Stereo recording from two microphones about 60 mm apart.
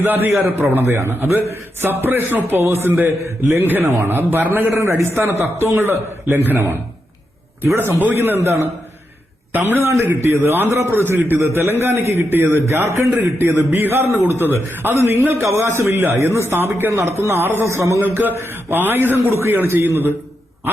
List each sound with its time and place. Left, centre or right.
0.0 s a man's voice: right
0.8 s a man's voice: right
4.5 s a man's voice: right
6.2 s a man's voice: right
7.8 s a man's voice: right
18.0 s a man's voice: right